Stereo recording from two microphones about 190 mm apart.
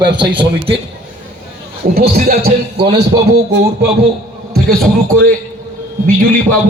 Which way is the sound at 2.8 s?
35° right (ahead or behind).